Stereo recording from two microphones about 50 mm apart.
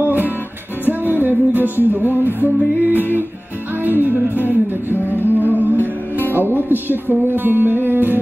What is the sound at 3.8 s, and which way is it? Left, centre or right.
Music, right.